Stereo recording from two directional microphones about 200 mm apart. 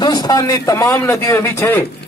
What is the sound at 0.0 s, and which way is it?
A man's voice, 20° left (ahead or behind).